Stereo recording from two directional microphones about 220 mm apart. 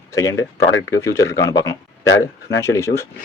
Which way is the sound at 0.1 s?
15° left (ahead or behind).